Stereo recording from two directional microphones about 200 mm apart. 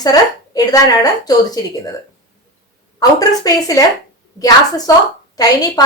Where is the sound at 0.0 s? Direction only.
20° left (ahead or behind).